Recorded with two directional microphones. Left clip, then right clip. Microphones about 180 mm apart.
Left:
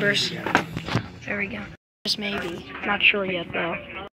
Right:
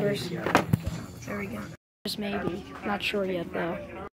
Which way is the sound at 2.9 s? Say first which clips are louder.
Left 9 dB; 15° right (ahead or behind).